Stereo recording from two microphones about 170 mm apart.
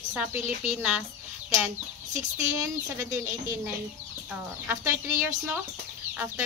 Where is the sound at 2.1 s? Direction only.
15° right (ahead or behind).